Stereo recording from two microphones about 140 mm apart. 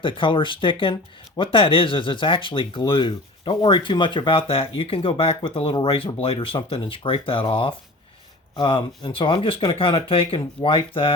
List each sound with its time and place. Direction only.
0.0 s speech: 35° left (ahead or behind)